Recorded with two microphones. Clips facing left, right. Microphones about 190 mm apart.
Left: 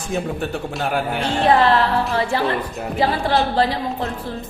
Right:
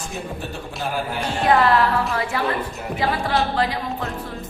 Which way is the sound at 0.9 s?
65° left (ahead or behind).